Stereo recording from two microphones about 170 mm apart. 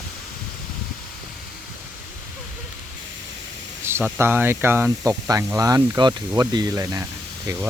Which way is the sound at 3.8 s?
15° right (ahead or behind).